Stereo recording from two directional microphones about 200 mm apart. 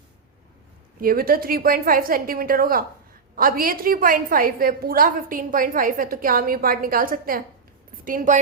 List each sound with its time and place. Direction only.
1.0 s a woman's voice: 45° right (ahead or behind)